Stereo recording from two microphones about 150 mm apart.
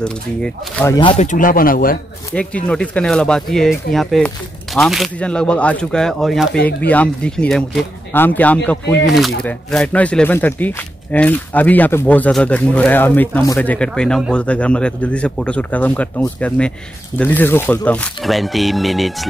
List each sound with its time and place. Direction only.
0.0 s speech: 5° left (ahead or behind)
0.8 s speech: 30° left (ahead or behind)
1.1 s speech: 55° left (ahead or behind); by 2.0 s 75° left (ahead or behind)
2.3 s speech: 10° left (ahead or behind)